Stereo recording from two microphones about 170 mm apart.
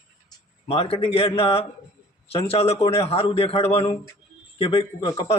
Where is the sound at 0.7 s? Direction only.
30° left (ahead or behind).